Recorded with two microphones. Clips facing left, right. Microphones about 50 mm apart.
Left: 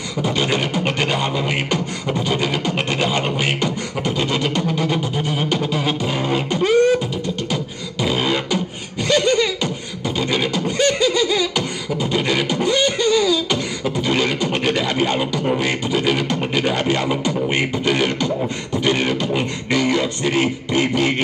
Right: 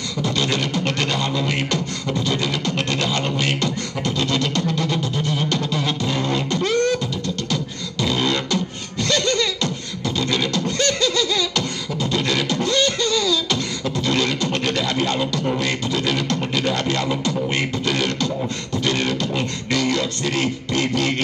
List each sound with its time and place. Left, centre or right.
0.2 s beatboxing: centre